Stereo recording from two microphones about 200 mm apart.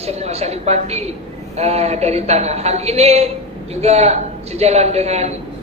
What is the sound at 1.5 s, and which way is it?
A man's voice, 30° right (ahead or behind).